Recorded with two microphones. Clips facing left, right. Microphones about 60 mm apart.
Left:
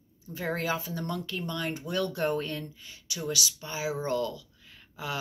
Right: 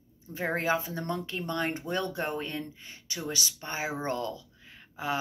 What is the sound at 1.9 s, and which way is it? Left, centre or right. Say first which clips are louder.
Speech: left 2 dB; right.